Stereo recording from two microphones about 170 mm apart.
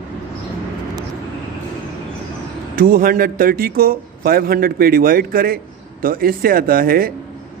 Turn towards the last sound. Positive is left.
turn(degrees=-60)  # may be behind; listen again after turning